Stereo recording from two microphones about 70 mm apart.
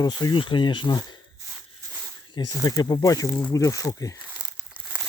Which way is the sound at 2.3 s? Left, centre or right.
Left.